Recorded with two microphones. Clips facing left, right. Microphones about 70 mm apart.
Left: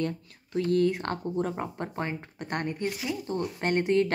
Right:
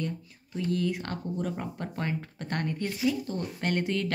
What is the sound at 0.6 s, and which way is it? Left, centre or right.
Speech, left.